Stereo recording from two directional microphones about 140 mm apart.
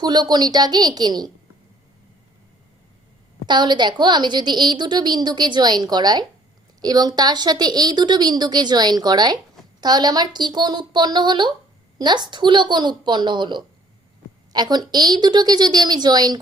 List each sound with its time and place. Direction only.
0.0 s a woman's voice: 30° right (ahead or behind)
3.4 s a woman's voice: 35° right (ahead or behind)